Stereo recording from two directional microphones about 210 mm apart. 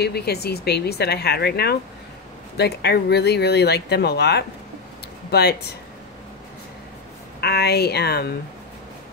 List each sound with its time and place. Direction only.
0.0 s speech: 50° left (ahead or behind)
7.3 s speech: 50° left (ahead or behind)